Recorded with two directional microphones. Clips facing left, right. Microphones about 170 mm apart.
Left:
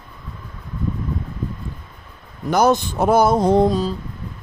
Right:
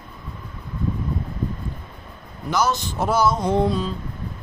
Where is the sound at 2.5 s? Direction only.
55° left (ahead or behind).